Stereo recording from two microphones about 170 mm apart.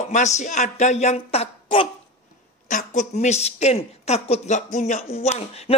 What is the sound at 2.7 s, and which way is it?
A man's voice, 45° left (ahead or behind).